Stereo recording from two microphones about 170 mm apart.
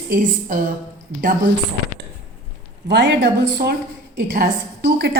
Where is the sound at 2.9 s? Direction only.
85° right.